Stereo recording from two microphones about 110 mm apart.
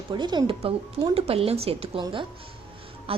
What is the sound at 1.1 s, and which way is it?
Speech, 60° right (ahead or behind).